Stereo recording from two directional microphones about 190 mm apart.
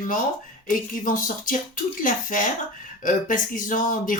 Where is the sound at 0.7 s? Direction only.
45° left (ahead or behind).